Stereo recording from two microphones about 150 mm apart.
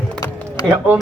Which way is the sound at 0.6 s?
25° left (ahead or behind).